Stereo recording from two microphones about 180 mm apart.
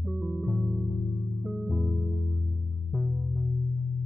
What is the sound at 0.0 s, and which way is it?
Music, centre (ahead or behind).